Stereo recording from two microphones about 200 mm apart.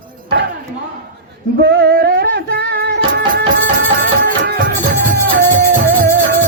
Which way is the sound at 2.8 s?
50° right (ahead or behind).